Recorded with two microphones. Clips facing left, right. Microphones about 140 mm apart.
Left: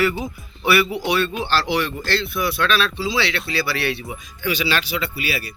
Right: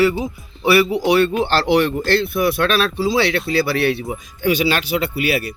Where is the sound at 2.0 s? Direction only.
45° right (ahead or behind).